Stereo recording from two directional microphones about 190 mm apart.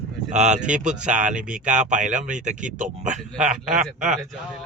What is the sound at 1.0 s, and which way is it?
Speech, 40° right (ahead or behind).